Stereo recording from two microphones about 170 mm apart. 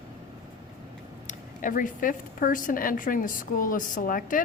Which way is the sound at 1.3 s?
50° left (ahead or behind).